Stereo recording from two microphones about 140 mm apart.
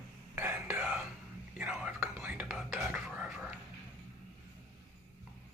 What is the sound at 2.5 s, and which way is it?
Speech, 5° right (ahead or behind).